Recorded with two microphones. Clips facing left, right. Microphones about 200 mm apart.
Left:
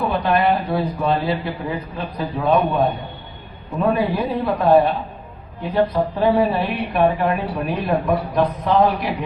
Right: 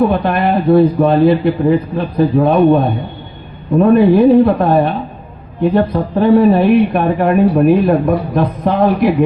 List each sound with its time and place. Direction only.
0.3 s a woman's voice: 55° right (ahead or behind)